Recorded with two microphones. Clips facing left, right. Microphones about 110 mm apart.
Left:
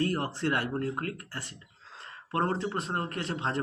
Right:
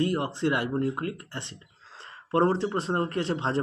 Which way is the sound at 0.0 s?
15° right (ahead or behind).